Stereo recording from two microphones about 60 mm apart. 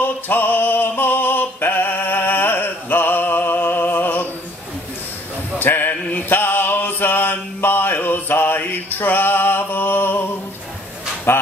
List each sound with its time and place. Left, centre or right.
0.0 s music: left
5.6 s male singing: left
11.3 s music: left